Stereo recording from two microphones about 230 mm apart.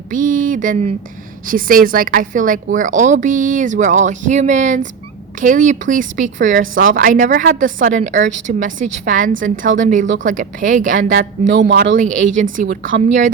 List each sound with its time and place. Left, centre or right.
0.1 s speech: right